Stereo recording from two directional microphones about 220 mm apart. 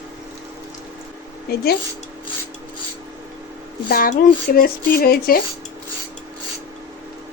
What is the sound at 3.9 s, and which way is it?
Speech, 40° left (ahead or behind).